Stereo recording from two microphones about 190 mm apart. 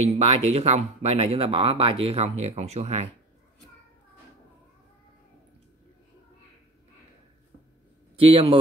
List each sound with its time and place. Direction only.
0.0 s speech: 35° right (ahead or behind)
8.2 s a man's voice: 30° right (ahead or behind)